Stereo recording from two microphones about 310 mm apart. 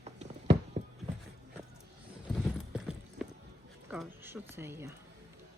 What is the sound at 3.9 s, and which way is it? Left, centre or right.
A woman's voice, centre.